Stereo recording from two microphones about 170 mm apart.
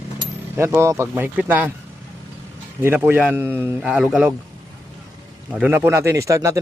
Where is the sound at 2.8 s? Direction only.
15° right (ahead or behind).